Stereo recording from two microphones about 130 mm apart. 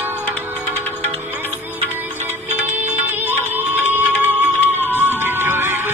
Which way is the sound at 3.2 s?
15° right (ahead or behind).